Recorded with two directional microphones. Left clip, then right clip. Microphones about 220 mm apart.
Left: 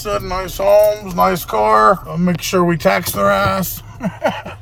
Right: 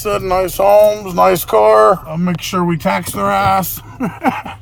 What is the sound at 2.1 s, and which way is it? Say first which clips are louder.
Speech: left 1 dB; 10° right (ahead or behind).